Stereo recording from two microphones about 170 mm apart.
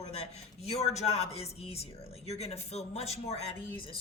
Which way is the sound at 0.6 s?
40° left (ahead or behind).